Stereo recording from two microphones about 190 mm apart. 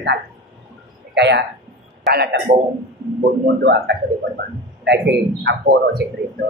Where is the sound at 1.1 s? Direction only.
65° right (ahead or behind).